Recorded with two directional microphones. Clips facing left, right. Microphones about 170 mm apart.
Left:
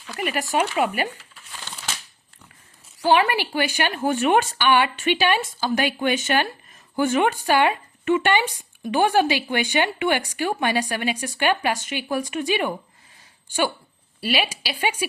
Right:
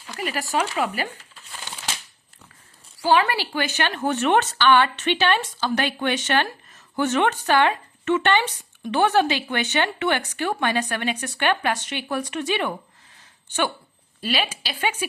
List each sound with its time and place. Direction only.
0.2 s speech: 20° left (ahead or behind)
3.0 s speech: 15° left (ahead or behind)
14.2 s speech: 10° left (ahead or behind)